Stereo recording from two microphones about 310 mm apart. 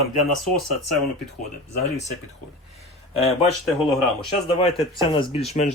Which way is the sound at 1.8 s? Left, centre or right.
Left.